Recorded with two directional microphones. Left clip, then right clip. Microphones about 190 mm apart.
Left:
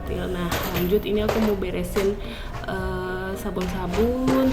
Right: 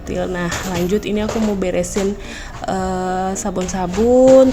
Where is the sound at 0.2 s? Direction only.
40° right (ahead or behind).